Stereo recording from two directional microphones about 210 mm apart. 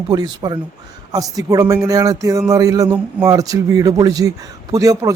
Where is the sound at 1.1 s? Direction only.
15° right (ahead or behind).